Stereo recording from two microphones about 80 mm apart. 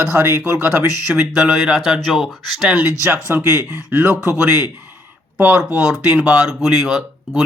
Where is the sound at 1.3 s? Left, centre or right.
Centre.